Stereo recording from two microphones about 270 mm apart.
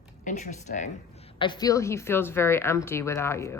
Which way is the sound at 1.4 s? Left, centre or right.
Centre.